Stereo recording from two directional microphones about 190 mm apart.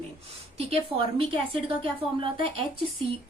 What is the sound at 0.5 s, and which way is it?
A woman's voice, 30° right (ahead or behind).